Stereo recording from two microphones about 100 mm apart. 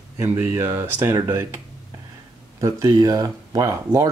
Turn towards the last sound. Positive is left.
turn(degrees=-35)  # may be behind; listen again after turning